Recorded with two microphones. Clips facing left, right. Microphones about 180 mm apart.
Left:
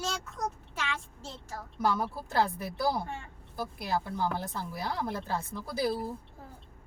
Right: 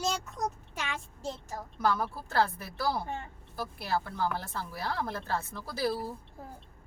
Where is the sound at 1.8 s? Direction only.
20° left (ahead or behind).